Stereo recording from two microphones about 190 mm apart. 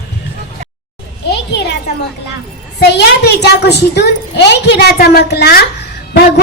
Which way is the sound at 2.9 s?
60° left (ahead or behind).